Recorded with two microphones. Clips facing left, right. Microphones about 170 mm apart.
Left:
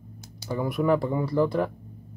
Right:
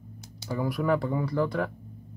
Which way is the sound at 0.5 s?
20° left (ahead or behind).